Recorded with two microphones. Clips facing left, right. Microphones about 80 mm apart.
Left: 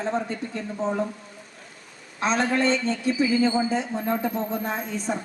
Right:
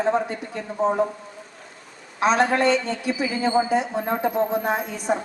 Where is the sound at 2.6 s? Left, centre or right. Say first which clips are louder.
Right 2 dB; centre.